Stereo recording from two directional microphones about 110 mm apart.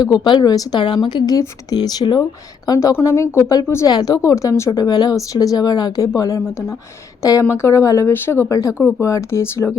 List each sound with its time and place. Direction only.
0.0 s speech: 40° left (ahead or behind)
2.6 s speech: 30° left (ahead or behind)